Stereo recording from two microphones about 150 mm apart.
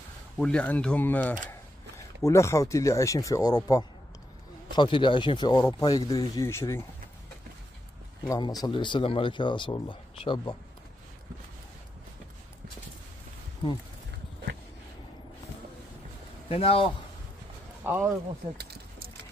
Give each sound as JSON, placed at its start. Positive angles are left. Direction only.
{"t": 0.4, "sound": "speech", "side_deg": 5}
{"t": 8.3, "sound": "speech", "side_deg": 25}
{"t": 16.4, "sound": "speech", "side_deg": 40}
{"t": 17.8, "sound": "speech", "side_deg": -15}
{"t": 18.6, "sound": "a sound", "side_deg": -90}